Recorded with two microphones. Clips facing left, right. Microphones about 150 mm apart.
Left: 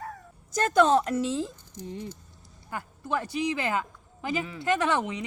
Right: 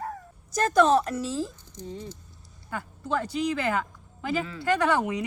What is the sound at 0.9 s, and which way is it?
Speech, 20° left (ahead or behind).